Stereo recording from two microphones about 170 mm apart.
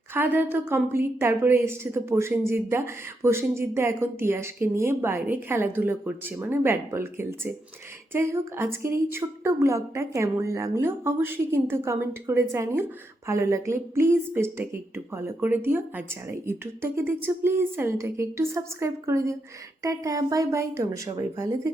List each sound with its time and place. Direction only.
0.1 s a woman's voice: 10° right (ahead or behind)